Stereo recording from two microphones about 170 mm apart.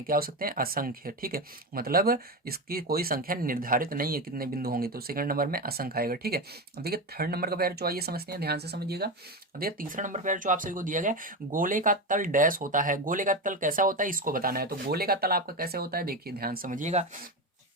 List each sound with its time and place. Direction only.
0.1 s speech: 60° right (ahead or behind)
9.6 s speech: 55° right (ahead or behind); by 17.1 s 40° right (ahead or behind)